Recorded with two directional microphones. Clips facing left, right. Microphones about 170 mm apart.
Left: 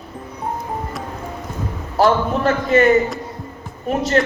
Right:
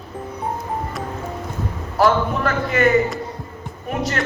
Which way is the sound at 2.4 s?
25° left (ahead or behind).